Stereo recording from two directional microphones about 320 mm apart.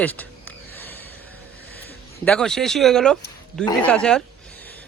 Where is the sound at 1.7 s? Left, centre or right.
Centre.